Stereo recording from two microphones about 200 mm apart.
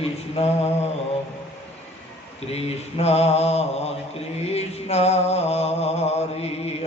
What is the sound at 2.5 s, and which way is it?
Mantra, 30° left (ahead or behind).